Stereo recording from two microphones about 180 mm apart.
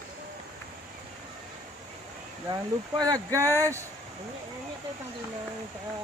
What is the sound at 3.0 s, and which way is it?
Speech, 20° right (ahead or behind).